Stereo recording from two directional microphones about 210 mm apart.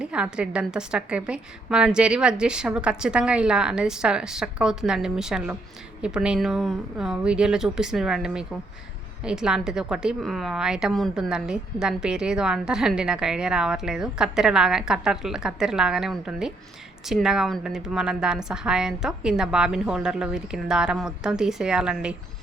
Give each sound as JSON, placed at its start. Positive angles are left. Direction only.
{"t": 0.0, "sound": "a woman's voice", "side_deg": -5}